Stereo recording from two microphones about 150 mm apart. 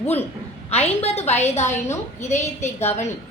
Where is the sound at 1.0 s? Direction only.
45° left (ahead or behind).